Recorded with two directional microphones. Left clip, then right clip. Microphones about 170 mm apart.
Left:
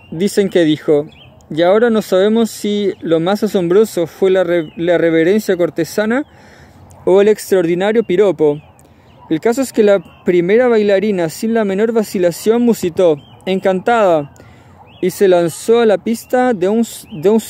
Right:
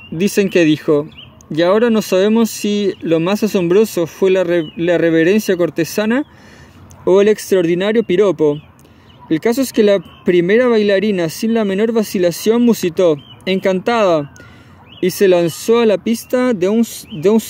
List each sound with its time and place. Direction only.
0.2 s speech: 15° right (ahead or behind)
2.0 s speech: 10° right (ahead or behind)
7.2 s speech: 10° right (ahead or behind)
17.1 s speech: 5° left (ahead or behind)